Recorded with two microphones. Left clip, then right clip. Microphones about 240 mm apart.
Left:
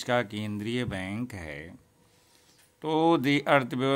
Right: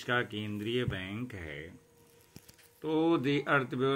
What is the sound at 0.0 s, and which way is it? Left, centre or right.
Speech, left.